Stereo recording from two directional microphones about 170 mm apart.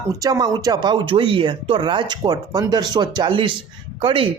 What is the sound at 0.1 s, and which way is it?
Speech, 20° right (ahead or behind).